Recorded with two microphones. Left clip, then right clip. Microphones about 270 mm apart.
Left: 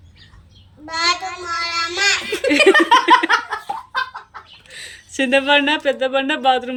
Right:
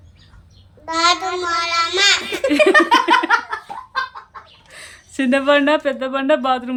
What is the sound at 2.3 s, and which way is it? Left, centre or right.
Giggle, centre.